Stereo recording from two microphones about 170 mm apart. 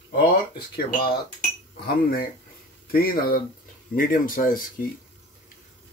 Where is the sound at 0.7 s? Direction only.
60° left (ahead or behind).